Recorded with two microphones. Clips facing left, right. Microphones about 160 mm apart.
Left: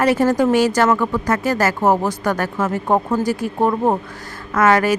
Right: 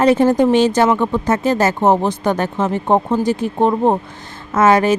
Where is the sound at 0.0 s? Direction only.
20° right (ahead or behind).